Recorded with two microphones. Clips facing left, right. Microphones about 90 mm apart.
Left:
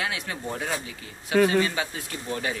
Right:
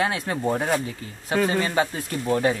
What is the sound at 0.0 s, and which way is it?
Speech, 40° right (ahead or behind).